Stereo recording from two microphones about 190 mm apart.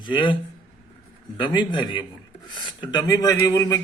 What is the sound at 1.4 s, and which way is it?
Speech, 25° left (ahead or behind).